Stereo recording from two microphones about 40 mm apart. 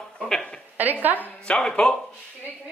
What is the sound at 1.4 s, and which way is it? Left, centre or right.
Speech, left.